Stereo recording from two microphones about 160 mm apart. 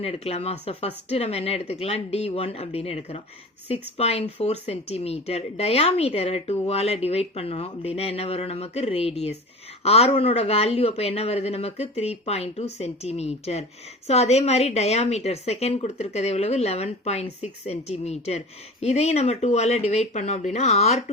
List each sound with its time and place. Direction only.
0.0 s a woman's voice: 40° left (ahead or behind)